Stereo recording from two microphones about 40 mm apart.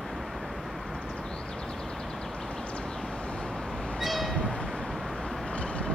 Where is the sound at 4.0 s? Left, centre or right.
Centre.